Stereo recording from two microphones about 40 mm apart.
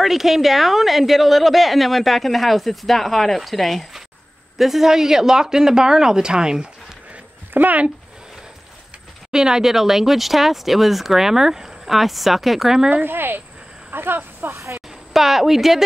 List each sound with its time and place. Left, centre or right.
0.0 s a woman's voice: centre
7.5 s speech: right
9.3 s a woman's voice: centre
13.0 s speech: right
15.1 s speech: centre